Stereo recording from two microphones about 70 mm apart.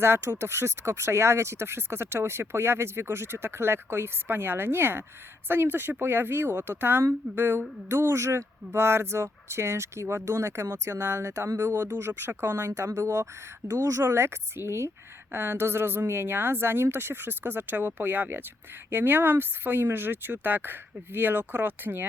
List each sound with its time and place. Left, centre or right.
0.0 s speech: right